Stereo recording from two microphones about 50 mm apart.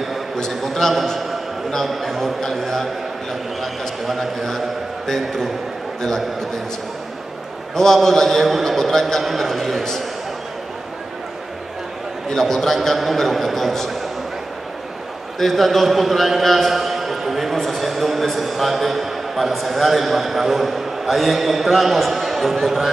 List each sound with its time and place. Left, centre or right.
0.4 s a man's voice: centre
7.7 s a man's voice: centre
12.3 s a man's voice: centre
15.3 s a man's voice: centre